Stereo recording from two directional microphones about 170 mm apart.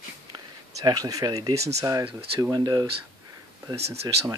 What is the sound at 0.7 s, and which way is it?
Speech, 20° right (ahead or behind).